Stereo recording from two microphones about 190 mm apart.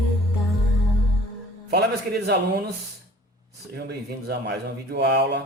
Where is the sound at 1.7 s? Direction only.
60° right (ahead or behind).